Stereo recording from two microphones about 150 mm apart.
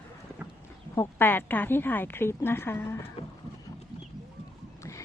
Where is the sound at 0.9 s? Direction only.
15° left (ahead or behind).